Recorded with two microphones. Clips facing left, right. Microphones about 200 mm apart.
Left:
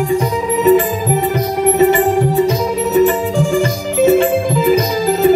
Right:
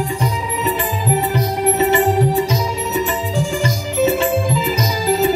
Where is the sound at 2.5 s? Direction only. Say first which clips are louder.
Left 6 dB; 55° left (ahead or behind).